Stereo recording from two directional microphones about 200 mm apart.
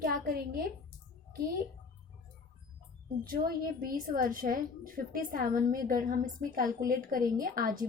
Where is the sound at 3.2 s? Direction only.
45° right (ahead or behind).